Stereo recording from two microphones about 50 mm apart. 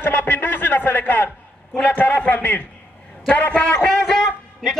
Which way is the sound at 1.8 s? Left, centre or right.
Left.